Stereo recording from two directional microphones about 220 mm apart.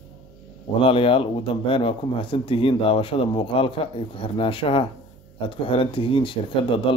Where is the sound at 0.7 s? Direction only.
25° left (ahead or behind).